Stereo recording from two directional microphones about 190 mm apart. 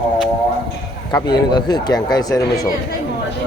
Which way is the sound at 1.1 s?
20° left (ahead or behind).